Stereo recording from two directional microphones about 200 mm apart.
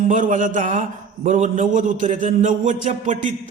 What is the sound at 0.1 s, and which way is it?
A man's voice, 40° right (ahead or behind).